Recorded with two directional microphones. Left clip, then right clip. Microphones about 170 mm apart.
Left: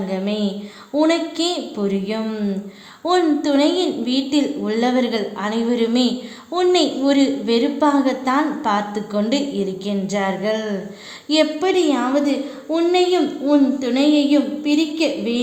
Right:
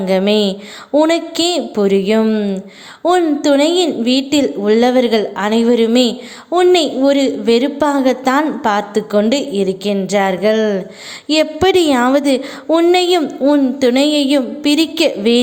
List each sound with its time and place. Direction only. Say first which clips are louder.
0.1 s a woman's voice: right 13 dB; 45° right (ahead or behind)